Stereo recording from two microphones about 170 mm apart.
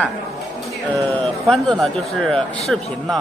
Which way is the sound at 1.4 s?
5° left (ahead or behind).